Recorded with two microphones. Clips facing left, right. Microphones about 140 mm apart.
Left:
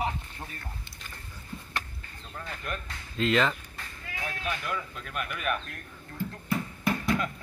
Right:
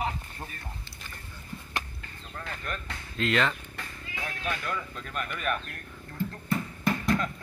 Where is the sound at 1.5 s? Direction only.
15° left (ahead or behind).